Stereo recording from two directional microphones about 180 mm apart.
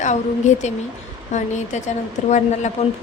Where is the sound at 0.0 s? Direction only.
40° left (ahead or behind).